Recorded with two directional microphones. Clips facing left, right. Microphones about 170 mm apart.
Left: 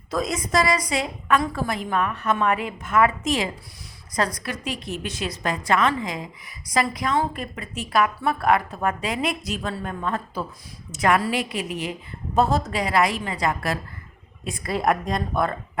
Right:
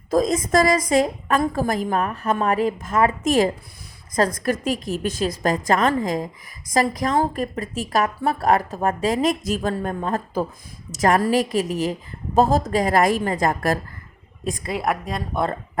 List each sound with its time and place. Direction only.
0.1 s a woman's voice: 40° right (ahead or behind)
3.2 s a woman's voice: 45° right (ahead or behind)
14.8 s a woman's voice: 5° right (ahead or behind)
15.4 s speech: 35° right (ahead or behind)